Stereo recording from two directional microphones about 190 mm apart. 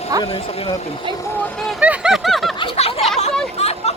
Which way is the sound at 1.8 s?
5° right (ahead or behind).